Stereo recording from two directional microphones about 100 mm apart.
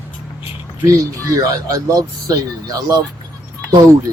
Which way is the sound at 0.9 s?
35° right (ahead or behind).